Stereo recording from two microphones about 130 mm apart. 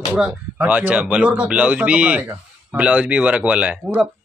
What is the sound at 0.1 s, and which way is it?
Speech, 10° right (ahead or behind).